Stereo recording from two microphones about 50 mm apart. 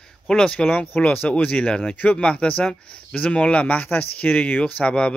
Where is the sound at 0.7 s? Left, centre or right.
Left.